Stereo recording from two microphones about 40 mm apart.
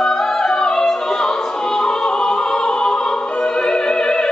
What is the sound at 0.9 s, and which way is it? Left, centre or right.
Opera, centre.